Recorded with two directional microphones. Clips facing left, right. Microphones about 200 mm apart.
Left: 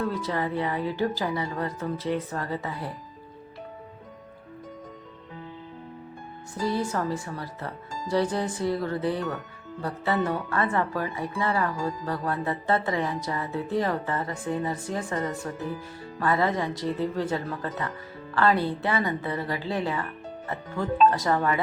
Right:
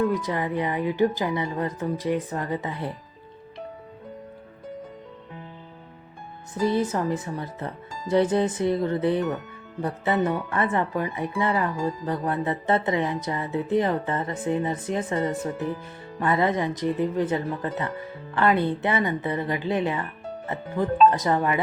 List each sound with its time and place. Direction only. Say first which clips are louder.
0.0 s speech: right 3 dB; 15° right (ahead or behind)
6.5 s speech: right 4 dB; 20° right (ahead or behind)
21.1 s speech: right 2 dB; 20° right (ahead or behind)